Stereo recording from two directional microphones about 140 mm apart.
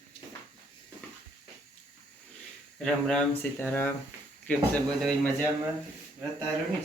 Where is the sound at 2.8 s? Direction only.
5° left (ahead or behind).